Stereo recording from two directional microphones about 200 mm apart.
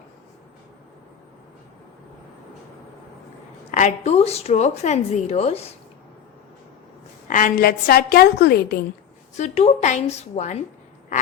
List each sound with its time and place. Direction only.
3.7 s a woman's voice: 40° left (ahead or behind)
7.3 s a woman's voice: 40° left (ahead or behind)
9.3 s a woman's voice: 35° left (ahead or behind)